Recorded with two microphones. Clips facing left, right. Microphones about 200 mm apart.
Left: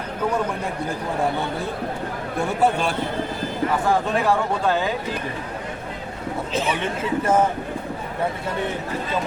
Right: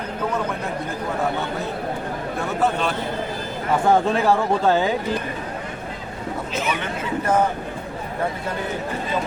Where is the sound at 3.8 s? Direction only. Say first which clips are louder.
Right 5 dB; 25° right (ahead or behind).